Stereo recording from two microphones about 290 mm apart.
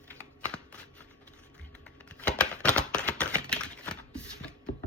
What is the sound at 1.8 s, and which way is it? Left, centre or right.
Typewriter, centre.